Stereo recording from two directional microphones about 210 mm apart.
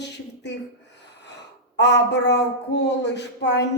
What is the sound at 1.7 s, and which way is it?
A woman's voice, 55° left (ahead or behind).